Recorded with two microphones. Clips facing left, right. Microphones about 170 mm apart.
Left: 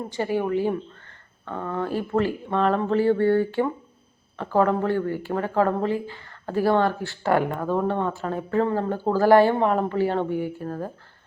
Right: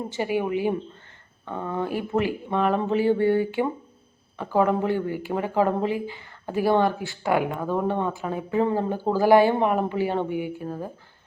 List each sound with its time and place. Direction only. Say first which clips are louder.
0.1 s speech: left 2 dB; 15° right (ahead or behind)